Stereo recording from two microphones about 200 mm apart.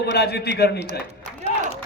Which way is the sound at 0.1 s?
55° left (ahead or behind).